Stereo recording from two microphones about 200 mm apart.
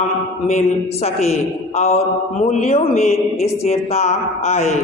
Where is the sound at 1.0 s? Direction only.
30° left (ahead or behind).